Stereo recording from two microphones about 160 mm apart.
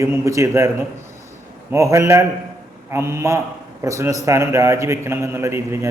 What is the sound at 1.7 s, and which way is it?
A man's voice, 20° right (ahead or behind).